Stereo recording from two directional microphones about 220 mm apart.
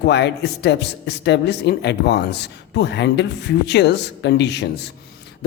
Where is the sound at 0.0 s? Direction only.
50° left (ahead or behind).